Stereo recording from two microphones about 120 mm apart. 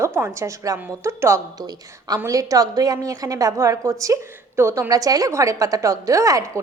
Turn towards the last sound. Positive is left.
turn(degrees=-25)  # may be behind; listen again after turning